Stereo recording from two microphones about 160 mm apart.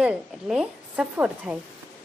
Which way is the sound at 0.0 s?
5° right (ahead or behind).